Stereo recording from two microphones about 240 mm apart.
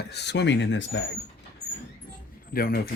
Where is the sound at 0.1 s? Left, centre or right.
Left.